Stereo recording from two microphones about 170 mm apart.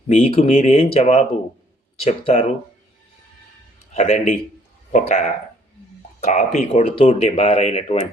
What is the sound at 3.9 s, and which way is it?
A man's voice, 40° left (ahead or behind).